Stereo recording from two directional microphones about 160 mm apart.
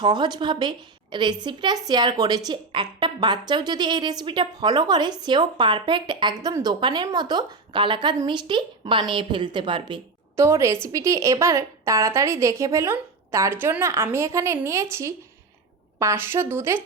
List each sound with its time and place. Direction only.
0.0 s a woman's voice: 30° right (ahead or behind)
10.3 s a woman's voice: 20° right (ahead or behind)